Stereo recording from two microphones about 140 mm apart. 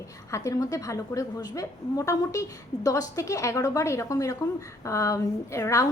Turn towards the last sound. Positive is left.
turn(degrees=20)  # may be behind; listen again after turning